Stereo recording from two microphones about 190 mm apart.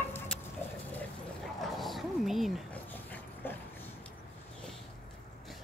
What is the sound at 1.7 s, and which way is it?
Roaring cats, centre (ahead or behind).